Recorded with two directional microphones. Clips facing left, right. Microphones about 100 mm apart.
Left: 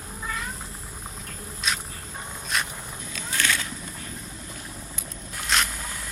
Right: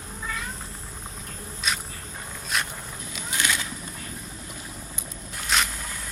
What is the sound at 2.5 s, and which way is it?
Walk, centre (ahead or behind).